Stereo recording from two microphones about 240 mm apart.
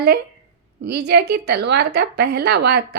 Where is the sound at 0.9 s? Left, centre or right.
Right.